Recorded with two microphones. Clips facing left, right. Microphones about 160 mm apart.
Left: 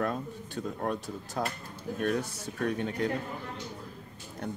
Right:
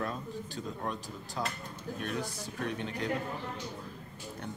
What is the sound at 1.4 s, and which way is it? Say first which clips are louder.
Speech: left 3 dB; 50° left (ahead or behind).